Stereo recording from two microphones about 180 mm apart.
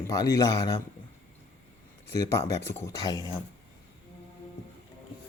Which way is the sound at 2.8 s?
20° left (ahead or behind).